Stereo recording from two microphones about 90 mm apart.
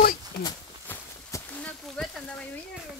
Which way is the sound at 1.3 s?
35° left (ahead or behind).